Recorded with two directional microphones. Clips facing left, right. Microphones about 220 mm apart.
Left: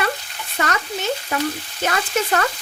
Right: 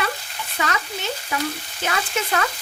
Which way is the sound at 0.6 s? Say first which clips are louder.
Left 3 dB; 50° left (ahead or behind).